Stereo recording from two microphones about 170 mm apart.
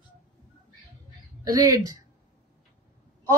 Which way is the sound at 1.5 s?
20° right (ahead or behind).